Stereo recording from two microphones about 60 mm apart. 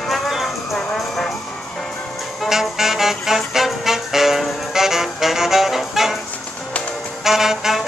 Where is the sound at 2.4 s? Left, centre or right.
Centre.